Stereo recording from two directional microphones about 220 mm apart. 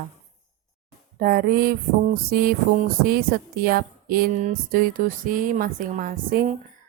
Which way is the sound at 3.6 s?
40° right (ahead or behind).